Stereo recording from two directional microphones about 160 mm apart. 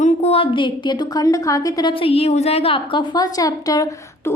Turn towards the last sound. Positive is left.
turn(degrees=20)  # may be behind; listen again after turning